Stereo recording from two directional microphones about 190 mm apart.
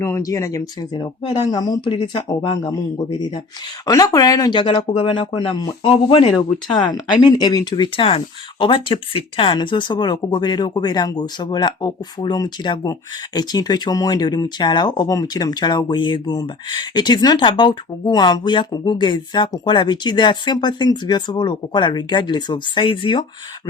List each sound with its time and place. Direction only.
0.0 s speech: 15° left (ahead or behind)